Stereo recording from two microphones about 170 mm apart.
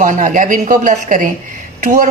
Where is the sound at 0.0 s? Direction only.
50° right (ahead or behind).